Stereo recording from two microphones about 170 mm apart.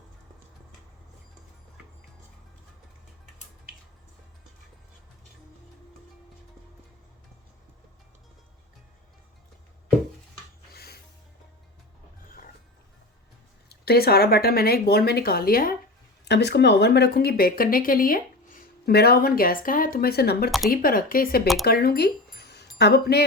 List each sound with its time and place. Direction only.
13.7 s speech: 65° left (ahead or behind)
16.2 s speech: 85° left